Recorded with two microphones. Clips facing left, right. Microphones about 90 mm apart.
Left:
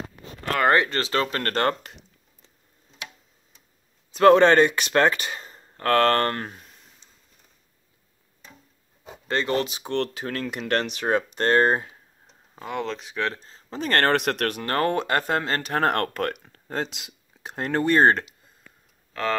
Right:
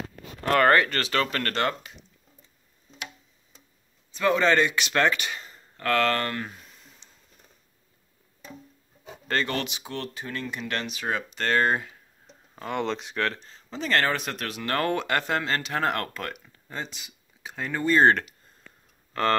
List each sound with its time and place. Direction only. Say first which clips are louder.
0.7 s speech: even; 25° left (ahead or behind)
1.5 s speech: left 3 dB; 45° left (ahead or behind)
4.1 s speech: left 7 dB; 70° left (ahead or behind); by 6.5 s 45° left (ahead or behind)
9.1 s speech: left 3 dB; 20° left (ahead or behind)
9.8 s speech: left 7 dB; 70° left (ahead or behind)
10.7 s speech: left 7 dB; 50° left (ahead or behind); by 11.9 s 30° left (ahead or behind)
12.5 s speech: right 1 dB; 5° left (ahead or behind)
13.3 s speech: left 2 dB; 35° left (ahead or behind); by 14.6 s 65° left (ahead or behind)
14.6 s speech: right 2 dB; 35° left (ahead or behind); by 16.7 s 50° left (ahead or behind)
16.7 s speech: left 6 dB; 90° left; by 17.9 s 65° left (ahead or behind)